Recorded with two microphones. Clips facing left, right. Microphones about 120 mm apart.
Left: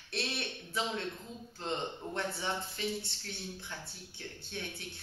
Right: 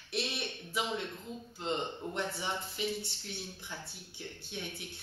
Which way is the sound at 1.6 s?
15° right (ahead or behind).